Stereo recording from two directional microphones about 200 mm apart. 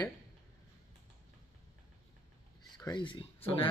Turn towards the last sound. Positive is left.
turn(degrees=25)  # may be behind; listen again after turning